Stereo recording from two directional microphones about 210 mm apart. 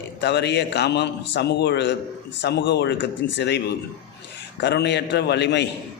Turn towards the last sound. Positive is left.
turn(degrees=55)  # may be behind; listen again after turning